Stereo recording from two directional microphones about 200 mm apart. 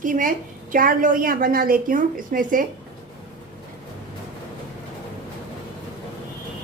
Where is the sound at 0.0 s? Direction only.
40° right (ahead or behind).